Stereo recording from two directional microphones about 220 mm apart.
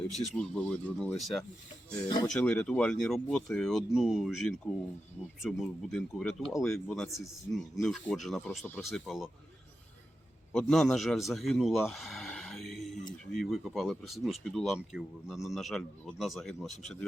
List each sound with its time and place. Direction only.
0.2 s speech: 5° left (ahead or behind)
1.9 s speech: 15° left (ahead or behind)
2.2 s speech: 5° left (ahead or behind)
10.5 s a man's voice: centre (ahead or behind)